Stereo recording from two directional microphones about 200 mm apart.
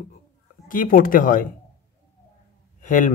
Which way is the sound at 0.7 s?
45° left (ahead or behind).